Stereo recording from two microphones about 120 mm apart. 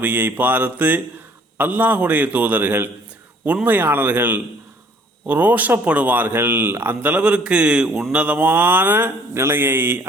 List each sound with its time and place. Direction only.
0.0 s speech: 15° right (ahead or behind)